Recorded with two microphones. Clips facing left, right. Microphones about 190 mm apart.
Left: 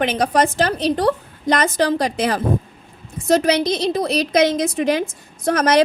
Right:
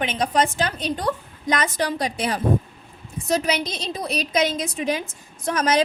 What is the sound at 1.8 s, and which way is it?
A woman's voice, 90° left.